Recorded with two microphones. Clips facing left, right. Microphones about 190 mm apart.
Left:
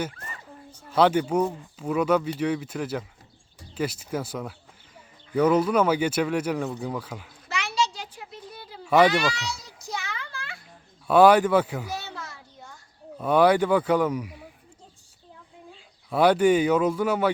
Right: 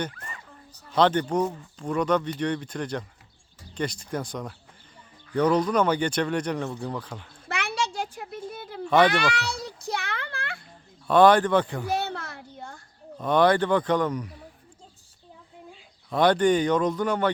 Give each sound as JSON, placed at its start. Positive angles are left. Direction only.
{"t": 0.9, "sound": "speech", "side_deg": 10}
{"t": 7.4, "sound": "a sound", "side_deg": -55}
{"t": 8.8, "sound": "speech", "side_deg": 10}
{"t": 9.3, "sound": "child singing", "side_deg": -60}
{"t": 11.1, "sound": "speech", "side_deg": 10}
{"t": 11.9, "sound": "a sound", "side_deg": -60}
{"t": 13.1, "sound": "speech", "side_deg": 10}
{"t": 16.0, "sound": "speech", "side_deg": 10}